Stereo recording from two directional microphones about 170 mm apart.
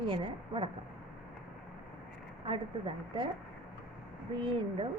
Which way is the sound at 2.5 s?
30° right (ahead or behind).